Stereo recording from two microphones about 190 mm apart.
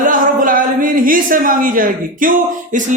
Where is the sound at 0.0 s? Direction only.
45° right (ahead or behind).